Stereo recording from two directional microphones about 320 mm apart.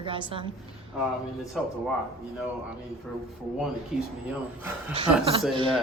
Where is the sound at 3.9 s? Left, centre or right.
Centre.